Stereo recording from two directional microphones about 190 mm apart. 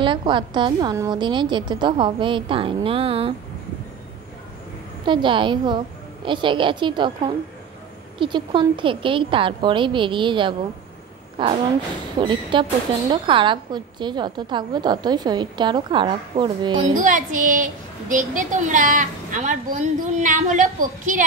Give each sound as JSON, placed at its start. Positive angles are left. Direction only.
{"t": 0.0, "sound": "a woman's voice", "side_deg": -25}
{"t": 5.0, "sound": "a woman's voice", "side_deg": -25}
{"t": 8.2, "sound": "a woman's voice", "side_deg": -25}
{"t": 16.9, "sound": "a woman's voice", "side_deg": -45}